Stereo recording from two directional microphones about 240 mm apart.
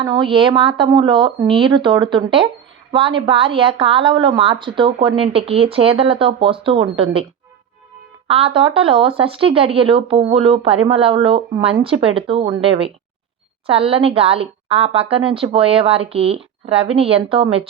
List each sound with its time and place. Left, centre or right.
0.0 s a woman's voice: centre
8.3 s a woman's voice: right